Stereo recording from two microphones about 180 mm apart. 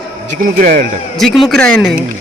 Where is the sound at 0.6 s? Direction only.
45° right (ahead or behind).